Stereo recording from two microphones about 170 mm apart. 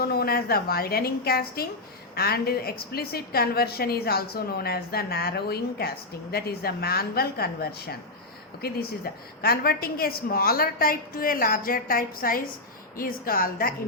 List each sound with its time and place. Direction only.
0.0 s a woman's voice: 65° left (ahead or behind)
9.1 s a woman's voice: 65° left (ahead or behind)